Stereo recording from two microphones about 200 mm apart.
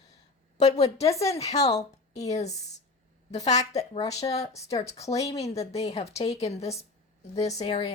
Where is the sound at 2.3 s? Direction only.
35° left (ahead or behind).